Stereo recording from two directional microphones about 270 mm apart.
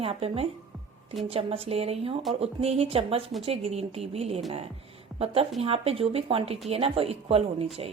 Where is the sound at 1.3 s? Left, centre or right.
Right.